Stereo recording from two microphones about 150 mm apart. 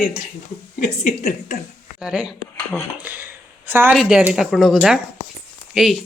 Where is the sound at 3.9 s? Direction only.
5° right (ahead or behind).